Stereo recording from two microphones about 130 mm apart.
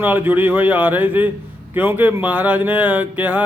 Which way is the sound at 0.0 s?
15° right (ahead or behind).